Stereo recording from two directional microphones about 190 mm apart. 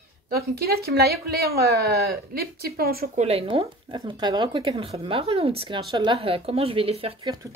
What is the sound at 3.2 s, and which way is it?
Speech, 30° right (ahead or behind).